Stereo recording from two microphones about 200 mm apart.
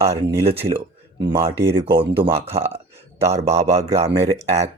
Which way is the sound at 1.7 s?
25° right (ahead or behind).